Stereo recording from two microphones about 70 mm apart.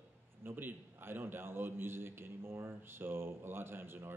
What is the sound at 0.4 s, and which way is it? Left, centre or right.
A man's voice, right.